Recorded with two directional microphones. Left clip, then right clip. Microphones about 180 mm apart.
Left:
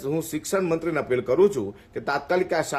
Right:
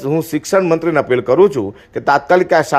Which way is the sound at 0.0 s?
30° right (ahead or behind).